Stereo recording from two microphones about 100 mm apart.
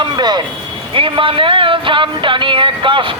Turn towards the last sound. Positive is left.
turn(degrees=-55)  # may be behind; listen again after turning